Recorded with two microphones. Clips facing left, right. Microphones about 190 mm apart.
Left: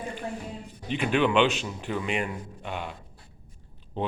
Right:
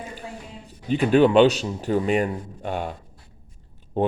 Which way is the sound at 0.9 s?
40° right (ahead or behind).